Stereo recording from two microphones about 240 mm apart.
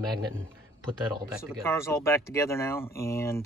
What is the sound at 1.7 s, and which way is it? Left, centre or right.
Speech, centre.